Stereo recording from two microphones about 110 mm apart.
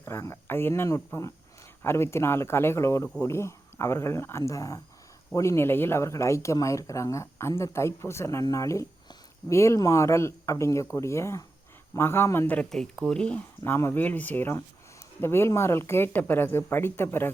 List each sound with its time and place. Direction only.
0.0 s speech: 25° left (ahead or behind)
12.7 s speech: 5° left (ahead or behind)
13.7 s speech: 20° left (ahead or behind)